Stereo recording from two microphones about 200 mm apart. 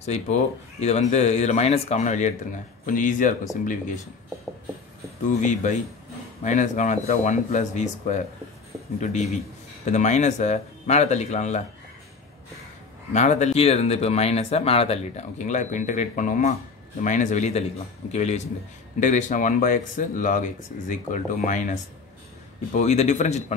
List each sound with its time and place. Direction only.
0.0 s speech: 35° left (ahead or behind)
5.4 s speech: 40° left (ahead or behind)
13.1 s speech: 35° left (ahead or behind)